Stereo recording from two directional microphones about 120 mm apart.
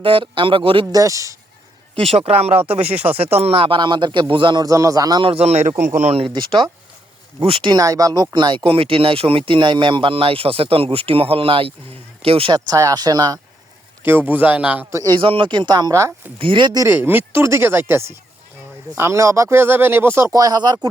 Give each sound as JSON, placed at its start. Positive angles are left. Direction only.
{"t": 0.0, "sound": "speech", "side_deg": -45}
{"t": 0.9, "sound": "speech", "side_deg": -30}
{"t": 2.0, "sound": "a man's voice", "side_deg": -60}
{"t": 5.2, "sound": "a man's voice", "side_deg": -60}
{"t": 5.9, "sound": "speech", "side_deg": -85}
{"t": 6.1, "sound": "speech", "side_deg": -45}
{"t": 7.7, "sound": "a man's voice", "side_deg": -30}
{"t": 8.6, "sound": "speech", "side_deg": -50}
{"t": 12.7, "sound": "a man's voice", "side_deg": -30}
{"t": 14.0, "sound": "a man's voice", "side_deg": -15}
{"t": 14.8, "sound": "speech", "side_deg": -25}
{"t": 15.1, "sound": "a man's voice", "side_deg": -45}
{"t": 16.4, "sound": "a man's voice", "side_deg": -45}
{"t": 16.8, "sound": "speech", "side_deg": -20}